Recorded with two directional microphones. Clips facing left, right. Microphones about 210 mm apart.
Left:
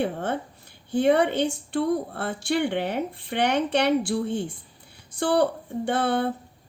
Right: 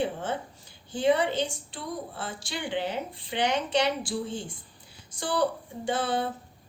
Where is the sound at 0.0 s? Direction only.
60° left (ahead or behind).